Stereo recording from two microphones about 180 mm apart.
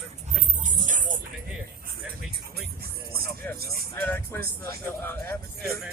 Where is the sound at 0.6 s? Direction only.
45° right (ahead or behind).